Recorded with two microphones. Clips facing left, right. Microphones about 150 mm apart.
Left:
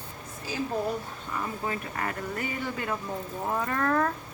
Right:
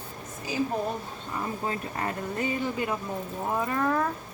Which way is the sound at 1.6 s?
25° right (ahead or behind).